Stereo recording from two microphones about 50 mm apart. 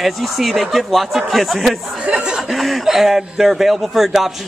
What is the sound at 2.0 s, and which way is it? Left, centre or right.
Chuckle, centre.